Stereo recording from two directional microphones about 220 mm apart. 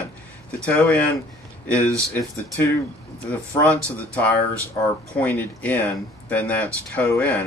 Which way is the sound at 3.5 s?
5° left (ahead or behind).